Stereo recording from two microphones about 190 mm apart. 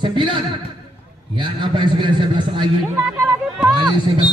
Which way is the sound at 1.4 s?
25° right (ahead or behind).